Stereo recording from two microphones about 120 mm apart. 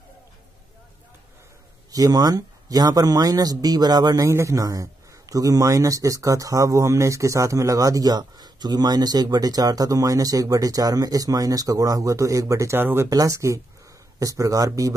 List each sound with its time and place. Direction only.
1.9 s speech: 30° right (ahead or behind)